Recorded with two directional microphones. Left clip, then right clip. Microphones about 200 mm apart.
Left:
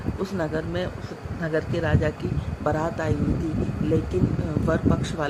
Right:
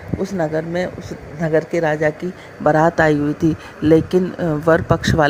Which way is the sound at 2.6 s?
40° right (ahead or behind).